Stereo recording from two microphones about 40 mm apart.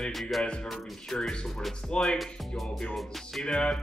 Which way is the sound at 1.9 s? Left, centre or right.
Left.